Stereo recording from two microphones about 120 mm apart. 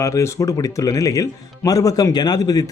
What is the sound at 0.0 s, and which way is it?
Speech, 25° left (ahead or behind).